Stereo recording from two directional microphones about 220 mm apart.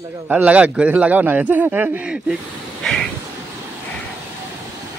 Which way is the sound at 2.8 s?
Centre (ahead or behind).